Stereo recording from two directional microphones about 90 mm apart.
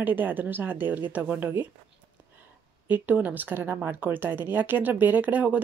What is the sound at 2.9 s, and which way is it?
Speech, 20° right (ahead or behind).